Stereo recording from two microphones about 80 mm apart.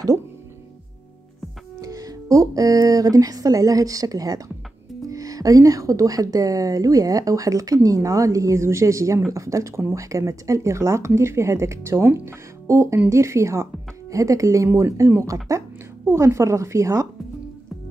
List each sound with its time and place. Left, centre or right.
1.8 s speech: right